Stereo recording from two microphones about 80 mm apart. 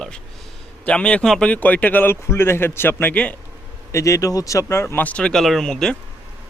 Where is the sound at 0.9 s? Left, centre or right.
Centre.